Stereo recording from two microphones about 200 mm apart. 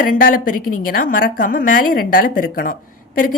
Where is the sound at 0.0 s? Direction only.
45° left (ahead or behind).